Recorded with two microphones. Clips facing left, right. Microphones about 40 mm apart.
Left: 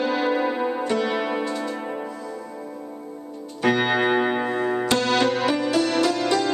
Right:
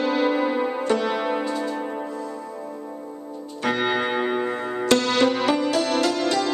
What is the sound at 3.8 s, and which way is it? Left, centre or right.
Music, centre.